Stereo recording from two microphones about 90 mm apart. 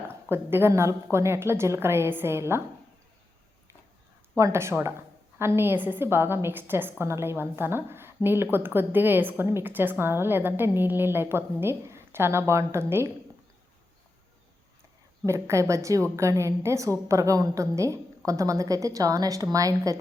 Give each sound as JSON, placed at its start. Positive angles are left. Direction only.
{"t": 0.3, "sound": "a woman's voice", "side_deg": -25}
{"t": 4.4, "sound": "a woman's voice", "side_deg": -35}
{"t": 15.3, "sound": "a woman's voice", "side_deg": -35}